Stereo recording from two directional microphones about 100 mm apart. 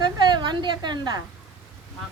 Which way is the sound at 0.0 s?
45° right (ahead or behind).